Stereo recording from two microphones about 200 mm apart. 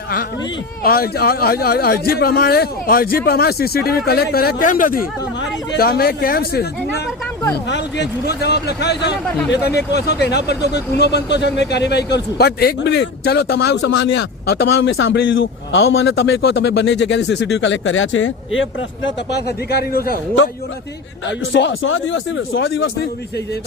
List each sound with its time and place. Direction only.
0.8 s a man's voice: 50° left (ahead or behind)
7.7 s speech: 55° left (ahead or behind)
21.2 s speech: 65° left (ahead or behind)